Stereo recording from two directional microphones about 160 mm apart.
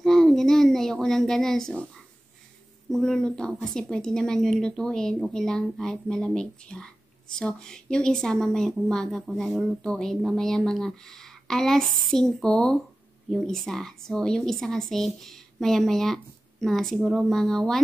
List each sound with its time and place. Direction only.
0.0 s speech: centre (ahead or behind)
2.9 s a woman's voice: 5° left (ahead or behind)